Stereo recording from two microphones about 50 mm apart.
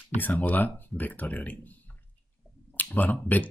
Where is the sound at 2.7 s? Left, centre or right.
Left.